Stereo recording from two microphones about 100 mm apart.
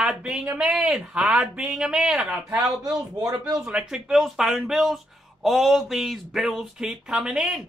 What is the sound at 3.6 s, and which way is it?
Speech, 10° right (ahead or behind).